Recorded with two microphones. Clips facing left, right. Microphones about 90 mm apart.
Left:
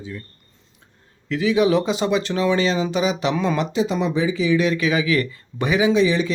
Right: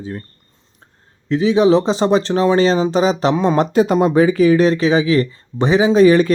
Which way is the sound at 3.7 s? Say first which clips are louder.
Right 8 dB; 50° right (ahead or behind).